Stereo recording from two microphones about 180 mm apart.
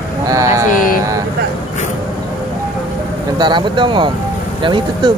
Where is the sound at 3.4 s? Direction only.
25° right (ahead or behind).